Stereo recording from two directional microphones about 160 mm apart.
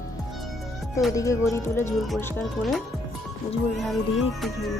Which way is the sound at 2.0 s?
Centre (ahead or behind).